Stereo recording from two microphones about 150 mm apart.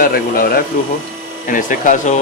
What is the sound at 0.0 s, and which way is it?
Speech, 85° left.